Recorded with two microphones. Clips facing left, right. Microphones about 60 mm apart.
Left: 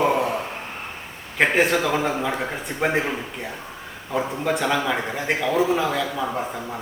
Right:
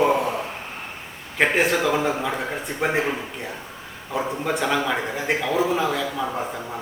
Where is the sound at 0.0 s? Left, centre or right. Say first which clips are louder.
Right 1 dB; centre.